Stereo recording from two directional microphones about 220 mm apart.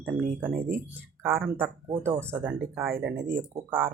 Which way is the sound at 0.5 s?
40° right (ahead or behind).